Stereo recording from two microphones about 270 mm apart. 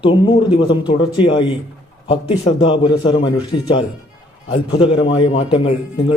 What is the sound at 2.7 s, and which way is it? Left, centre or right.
Speech, centre.